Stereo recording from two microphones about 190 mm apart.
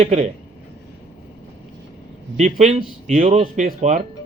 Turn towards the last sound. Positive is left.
turn(degrees=-35)  # may be behind; listen again after turning